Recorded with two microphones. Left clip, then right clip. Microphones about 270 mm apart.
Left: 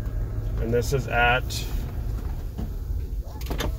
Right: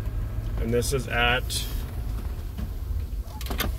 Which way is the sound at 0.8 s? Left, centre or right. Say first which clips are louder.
Left 2 dB; right.